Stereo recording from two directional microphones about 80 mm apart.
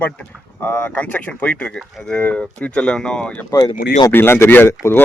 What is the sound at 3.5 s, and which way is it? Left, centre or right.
Speech, left.